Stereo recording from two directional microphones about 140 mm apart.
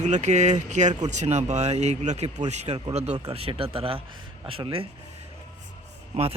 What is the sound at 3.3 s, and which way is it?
Speech, 40° right (ahead or behind).